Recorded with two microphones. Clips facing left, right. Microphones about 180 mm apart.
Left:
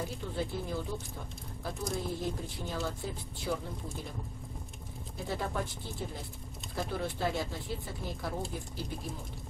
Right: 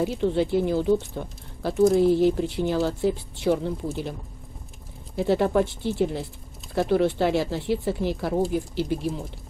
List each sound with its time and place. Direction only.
0.0 s speech: 80° right
5.1 s speech: 75° right (ahead or behind)